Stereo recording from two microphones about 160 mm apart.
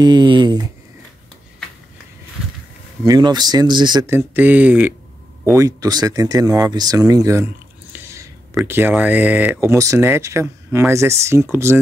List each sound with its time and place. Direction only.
0.0 s speech: 30° right (ahead or behind)
3.1 s speech: 25° right (ahead or behind)
4.1 s speech: 15° right (ahead or behind)
7.9 s a sound: 15° right (ahead or behind)
8.6 s speech: 15° right (ahead or behind)